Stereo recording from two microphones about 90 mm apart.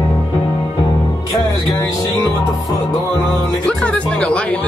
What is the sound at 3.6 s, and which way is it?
Music, 10° left (ahead or behind).